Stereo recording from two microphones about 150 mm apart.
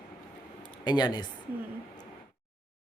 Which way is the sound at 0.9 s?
30° left (ahead or behind).